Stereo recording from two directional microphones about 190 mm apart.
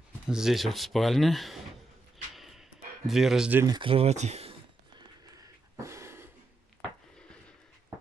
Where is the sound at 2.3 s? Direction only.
Centre (ahead or behind).